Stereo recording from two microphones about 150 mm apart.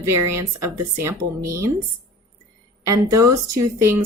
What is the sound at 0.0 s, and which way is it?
Speech, 20° right (ahead or behind).